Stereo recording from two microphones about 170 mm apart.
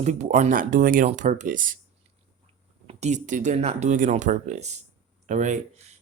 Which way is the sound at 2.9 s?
40° right (ahead or behind).